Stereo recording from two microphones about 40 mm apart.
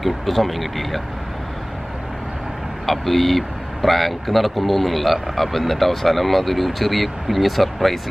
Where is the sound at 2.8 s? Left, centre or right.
Centre.